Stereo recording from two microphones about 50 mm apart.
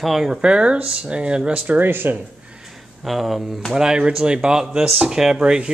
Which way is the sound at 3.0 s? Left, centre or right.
Centre.